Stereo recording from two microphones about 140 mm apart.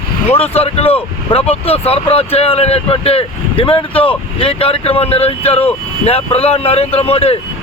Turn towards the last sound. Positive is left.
turn(degrees=45)  # may be behind; listen again after turning